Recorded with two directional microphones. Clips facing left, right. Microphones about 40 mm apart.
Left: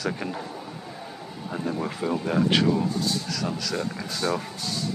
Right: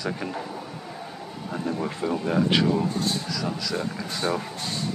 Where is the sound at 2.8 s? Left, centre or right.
Right.